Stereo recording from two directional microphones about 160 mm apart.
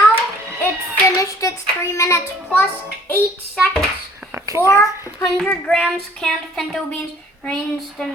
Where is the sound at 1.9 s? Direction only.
20° left (ahead or behind).